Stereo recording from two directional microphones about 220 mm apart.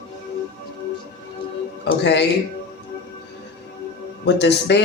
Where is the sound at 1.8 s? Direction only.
50° left (ahead or behind).